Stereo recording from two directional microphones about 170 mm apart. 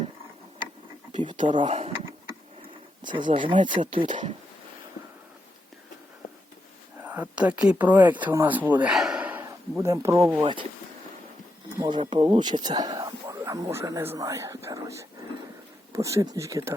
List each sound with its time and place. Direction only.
1.1 s a sound: 25° right (ahead or behind)
1.5 s speech: 40° right (ahead or behind)
3.3 s speech: 30° right (ahead or behind)
4.1 s speech: 45° right (ahead or behind)
7.0 s speech: 10° right (ahead or behind)
10.4 s speech: 30° right (ahead or behind)
11.8 s speech: 25° right (ahead or behind)